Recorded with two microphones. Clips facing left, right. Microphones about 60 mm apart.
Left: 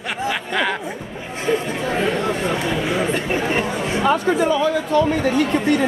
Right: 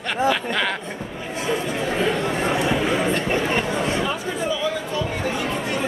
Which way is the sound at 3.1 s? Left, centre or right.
Centre.